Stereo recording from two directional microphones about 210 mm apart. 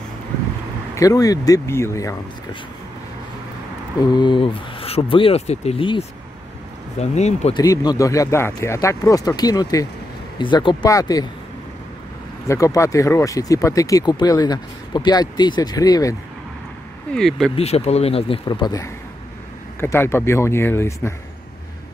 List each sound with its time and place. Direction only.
0.9 s speech: 15° left (ahead or behind)
4.1 s speech: 20° left (ahead or behind)
7.5 s speech: 20° left (ahead or behind)
12.4 s speech: 15° left (ahead or behind)
17.1 s speech: centre (ahead or behind)
17.6 s speech: 30° left (ahead or behind); by 21.1 s 10° left (ahead or behind)